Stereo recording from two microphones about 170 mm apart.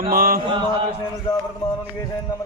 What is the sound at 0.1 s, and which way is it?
Chant, 60° right (ahead or behind).